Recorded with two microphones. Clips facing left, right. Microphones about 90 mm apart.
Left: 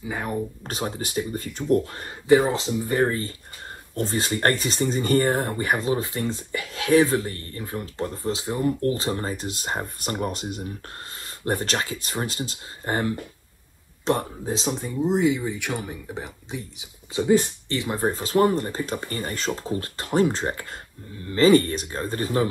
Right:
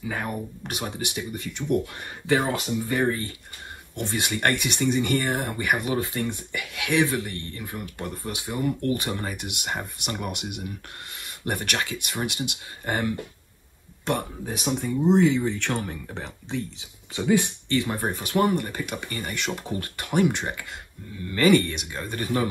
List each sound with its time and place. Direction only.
0.0 s speech: 20° left (ahead or behind)
0.9 s speech: 40° left (ahead or behind)
2.0 s speech: 20° left (ahead or behind)
3.1 s speech: 35° left (ahead or behind)
5.3 s speech: 25° left (ahead or behind)